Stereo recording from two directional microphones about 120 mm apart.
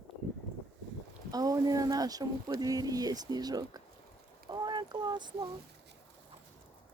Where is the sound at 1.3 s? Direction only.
30° right (ahead or behind).